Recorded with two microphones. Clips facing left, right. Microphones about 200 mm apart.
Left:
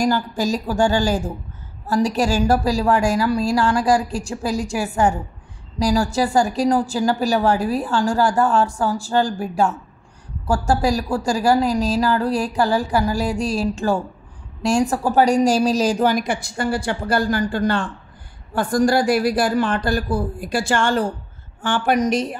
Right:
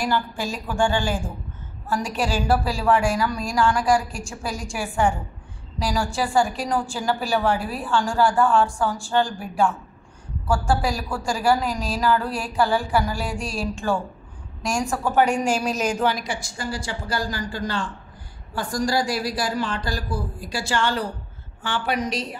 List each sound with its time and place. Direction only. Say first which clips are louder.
0.0 s a woman's voice: left 5 dB; 40° left (ahead or behind)